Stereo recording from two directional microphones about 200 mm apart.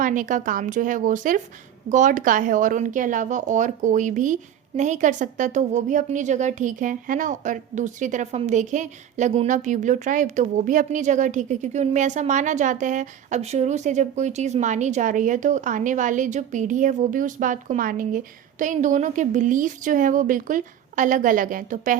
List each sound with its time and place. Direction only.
0.0 s a woman's voice: 40° right (ahead or behind)